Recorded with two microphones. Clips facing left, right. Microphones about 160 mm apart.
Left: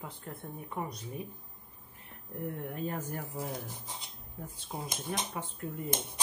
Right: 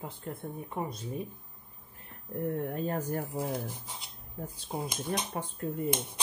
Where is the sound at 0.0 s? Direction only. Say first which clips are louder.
Right 4 dB; 25° right (ahead or behind).